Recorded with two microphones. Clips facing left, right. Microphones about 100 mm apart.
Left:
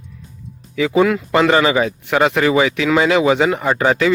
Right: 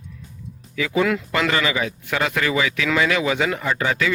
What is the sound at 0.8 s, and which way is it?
Speech, 30° left (ahead or behind).